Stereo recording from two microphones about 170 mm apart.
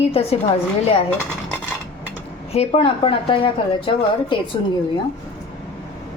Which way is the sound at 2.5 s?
35° left (ahead or behind).